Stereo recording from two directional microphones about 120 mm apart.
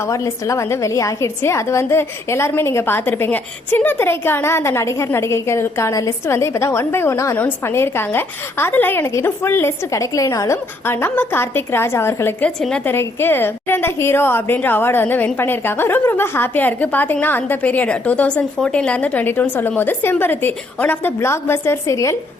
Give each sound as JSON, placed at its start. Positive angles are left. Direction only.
{"t": 0.1, "sound": "a woman's voice", "side_deg": 25}